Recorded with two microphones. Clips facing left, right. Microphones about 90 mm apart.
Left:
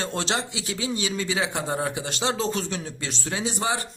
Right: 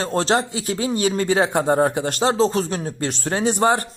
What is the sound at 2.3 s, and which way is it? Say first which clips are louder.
Speech: right 8 dB; 35° right (ahead or behind).